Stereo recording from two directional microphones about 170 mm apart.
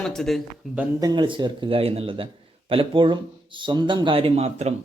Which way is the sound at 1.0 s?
25° right (ahead or behind).